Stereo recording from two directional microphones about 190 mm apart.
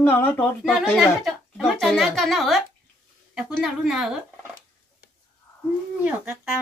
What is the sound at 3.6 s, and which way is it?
Speech, 5° right (ahead or behind).